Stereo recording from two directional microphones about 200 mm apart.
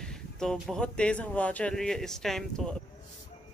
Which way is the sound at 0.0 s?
5° left (ahead or behind).